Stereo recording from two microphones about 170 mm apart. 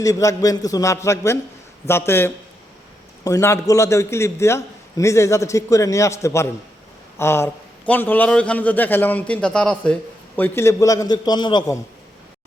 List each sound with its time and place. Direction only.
0.0 s a man's voice: 20° left (ahead or behind)